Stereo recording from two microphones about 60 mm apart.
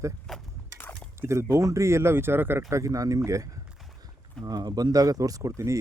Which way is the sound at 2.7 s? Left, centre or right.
Right.